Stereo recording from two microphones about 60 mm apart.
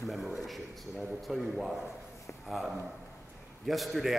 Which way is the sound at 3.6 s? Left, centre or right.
Centre.